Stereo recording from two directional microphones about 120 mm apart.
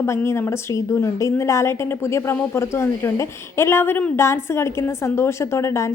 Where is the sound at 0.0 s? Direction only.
20° left (ahead or behind).